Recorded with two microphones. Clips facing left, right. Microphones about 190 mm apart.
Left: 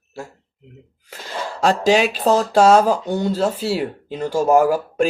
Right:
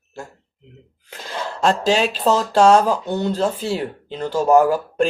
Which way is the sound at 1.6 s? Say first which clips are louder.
Left 2 dB; 10° left (ahead or behind).